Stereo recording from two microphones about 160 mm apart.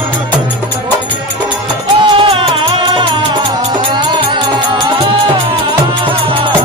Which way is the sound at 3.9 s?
30° right (ahead or behind).